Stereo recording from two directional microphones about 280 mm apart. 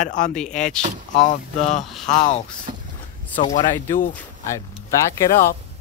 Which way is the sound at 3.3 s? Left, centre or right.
Left.